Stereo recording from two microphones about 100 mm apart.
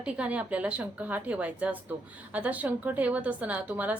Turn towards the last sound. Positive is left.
turn(degrees=-15)  # may be behind; listen again after turning